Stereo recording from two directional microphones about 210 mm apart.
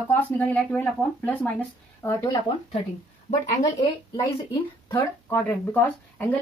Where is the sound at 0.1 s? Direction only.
5° left (ahead or behind).